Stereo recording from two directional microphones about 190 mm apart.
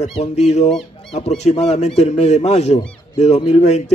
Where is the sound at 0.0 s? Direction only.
35° left (ahead or behind).